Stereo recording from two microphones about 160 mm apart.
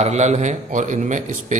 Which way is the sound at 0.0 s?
45° right (ahead or behind).